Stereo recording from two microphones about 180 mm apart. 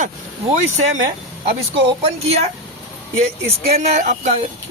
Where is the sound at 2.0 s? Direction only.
35° right (ahead or behind).